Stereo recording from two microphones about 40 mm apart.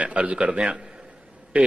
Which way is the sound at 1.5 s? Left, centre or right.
Right.